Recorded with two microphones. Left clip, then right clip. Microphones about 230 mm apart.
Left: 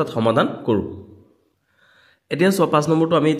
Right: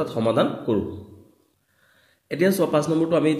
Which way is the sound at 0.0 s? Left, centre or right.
Left.